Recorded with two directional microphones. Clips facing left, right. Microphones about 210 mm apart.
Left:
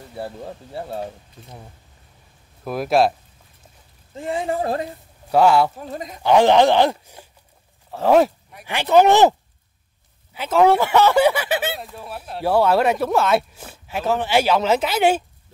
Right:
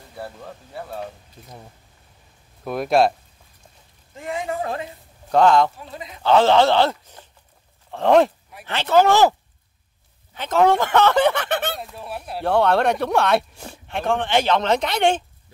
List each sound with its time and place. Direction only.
0.2 s speech: 30° left (ahead or behind)
2.6 s speech: centre (ahead or behind)
4.1 s speech: 30° left (ahead or behind)
5.3 s speech: 10° left (ahead or behind)
5.8 s speech: 45° left (ahead or behind)
6.2 s speech: 15° left (ahead or behind)
8.6 s speech: 15° left (ahead or behind)
10.3 s speech: 10° left (ahead or behind)